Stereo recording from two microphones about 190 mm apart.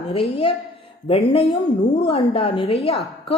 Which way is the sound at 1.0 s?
30° left (ahead or behind).